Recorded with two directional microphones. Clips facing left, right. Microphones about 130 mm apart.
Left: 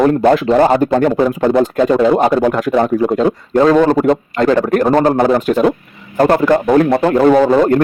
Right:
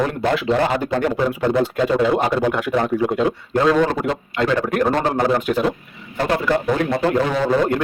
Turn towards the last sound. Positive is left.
turn(degrees=50)  # may be behind; listen again after turning